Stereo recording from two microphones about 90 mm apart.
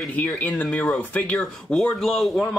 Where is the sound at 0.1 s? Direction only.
15° left (ahead or behind).